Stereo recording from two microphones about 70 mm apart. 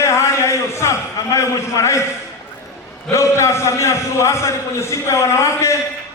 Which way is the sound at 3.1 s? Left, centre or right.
Left.